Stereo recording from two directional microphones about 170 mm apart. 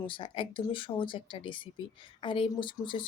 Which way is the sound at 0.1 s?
30° left (ahead or behind).